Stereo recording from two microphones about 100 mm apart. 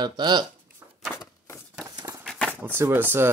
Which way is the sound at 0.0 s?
45° right (ahead or behind).